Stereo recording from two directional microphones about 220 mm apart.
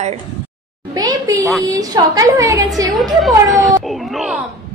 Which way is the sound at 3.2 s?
Centre (ahead or behind).